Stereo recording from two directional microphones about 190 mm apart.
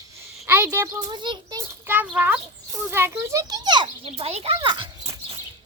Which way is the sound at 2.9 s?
10° right (ahead or behind).